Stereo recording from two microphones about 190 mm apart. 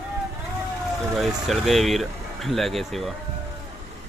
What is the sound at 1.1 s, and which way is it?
Speech, centre (ahead or behind).